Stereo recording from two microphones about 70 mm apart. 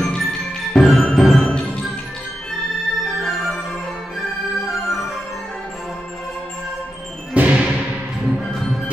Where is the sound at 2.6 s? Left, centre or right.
Centre.